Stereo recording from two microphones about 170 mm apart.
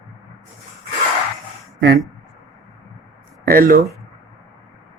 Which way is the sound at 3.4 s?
60° right (ahead or behind).